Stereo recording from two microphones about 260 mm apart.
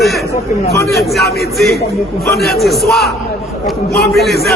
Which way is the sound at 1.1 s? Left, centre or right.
Centre.